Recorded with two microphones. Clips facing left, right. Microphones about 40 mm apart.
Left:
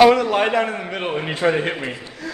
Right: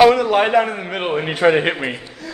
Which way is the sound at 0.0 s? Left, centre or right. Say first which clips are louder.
Right 1 dB; centre.